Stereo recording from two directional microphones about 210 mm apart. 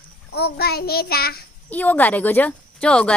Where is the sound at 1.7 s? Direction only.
10° left (ahead or behind).